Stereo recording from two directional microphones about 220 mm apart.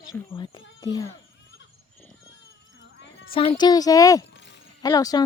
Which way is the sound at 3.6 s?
15° left (ahead or behind).